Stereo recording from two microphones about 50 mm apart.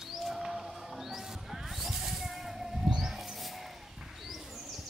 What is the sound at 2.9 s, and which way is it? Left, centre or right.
Mouse, centre.